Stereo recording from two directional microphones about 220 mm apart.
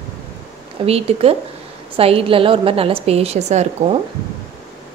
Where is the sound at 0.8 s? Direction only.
25° right (ahead or behind).